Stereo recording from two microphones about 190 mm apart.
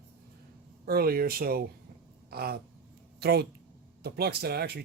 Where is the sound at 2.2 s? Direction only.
55° right (ahead or behind).